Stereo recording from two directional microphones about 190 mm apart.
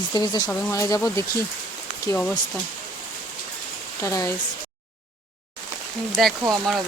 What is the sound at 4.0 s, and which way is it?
Speech, 15° left (ahead or behind).